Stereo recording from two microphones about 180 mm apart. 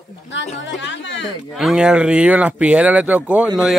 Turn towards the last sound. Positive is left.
turn(degrees=-5)  # may be behind; listen again after turning